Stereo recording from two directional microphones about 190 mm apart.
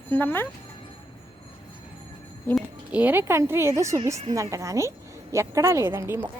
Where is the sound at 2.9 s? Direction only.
10° right (ahead or behind).